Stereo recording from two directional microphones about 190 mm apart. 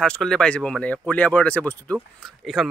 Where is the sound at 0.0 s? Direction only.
5° left (ahead or behind).